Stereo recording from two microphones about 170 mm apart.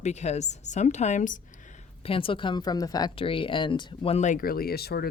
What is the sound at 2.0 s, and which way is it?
Speech, 30° left (ahead or behind).